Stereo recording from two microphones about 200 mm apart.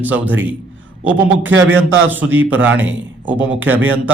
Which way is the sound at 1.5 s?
65° right (ahead or behind).